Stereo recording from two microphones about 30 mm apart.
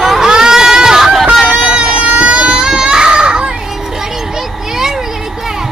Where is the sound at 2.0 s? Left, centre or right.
Right.